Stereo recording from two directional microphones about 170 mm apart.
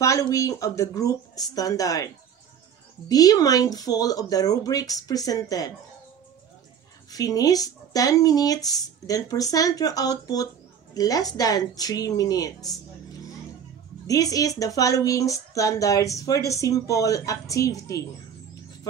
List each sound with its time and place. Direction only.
0.0 s speech: 20° left (ahead or behind)
3.1 s speech: 20° left (ahead or behind)
7.1 s speech: 20° left (ahead or behind)
14.0 s speech: 20° left (ahead or behind)